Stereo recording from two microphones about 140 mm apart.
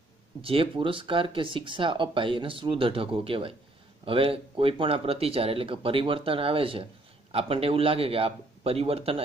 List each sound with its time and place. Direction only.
0.4 s a man's voice: 40° right (ahead or behind)